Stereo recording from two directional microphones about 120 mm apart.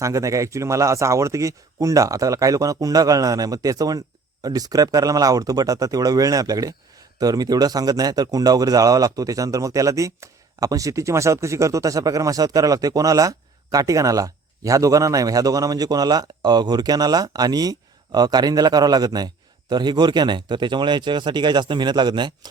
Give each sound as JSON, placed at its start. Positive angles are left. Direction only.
{"t": 0.0, "sound": "speech", "side_deg": -25}